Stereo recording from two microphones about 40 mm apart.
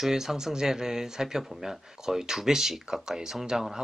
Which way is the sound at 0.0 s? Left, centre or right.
Centre.